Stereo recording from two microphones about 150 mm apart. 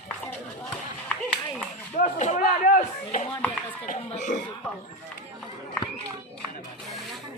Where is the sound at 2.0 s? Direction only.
55° left (ahead or behind).